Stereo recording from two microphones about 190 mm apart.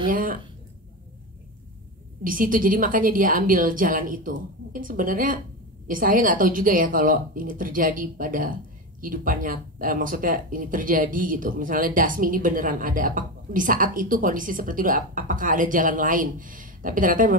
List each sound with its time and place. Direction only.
0.1 s speech: 50° right (ahead or behind)
2.2 s speech: 45° right (ahead or behind)